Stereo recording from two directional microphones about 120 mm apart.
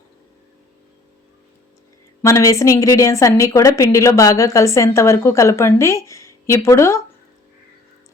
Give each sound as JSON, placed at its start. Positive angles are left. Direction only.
{"t": 2.2, "sound": "a woman's voice", "side_deg": 25}